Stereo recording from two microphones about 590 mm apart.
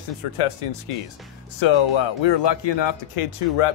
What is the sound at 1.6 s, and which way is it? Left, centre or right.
Speech, left.